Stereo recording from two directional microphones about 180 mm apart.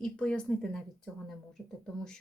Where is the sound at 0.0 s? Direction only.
5° left (ahead or behind).